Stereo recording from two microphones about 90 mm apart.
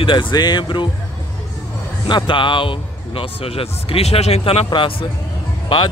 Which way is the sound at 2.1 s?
60° left (ahead or behind).